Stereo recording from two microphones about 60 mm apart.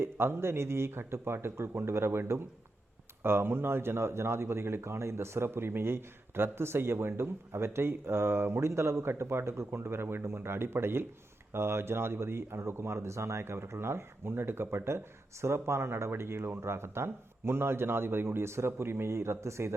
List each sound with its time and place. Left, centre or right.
0.0 s speech: right